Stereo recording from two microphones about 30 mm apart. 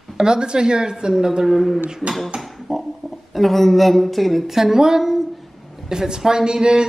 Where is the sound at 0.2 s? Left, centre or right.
Right.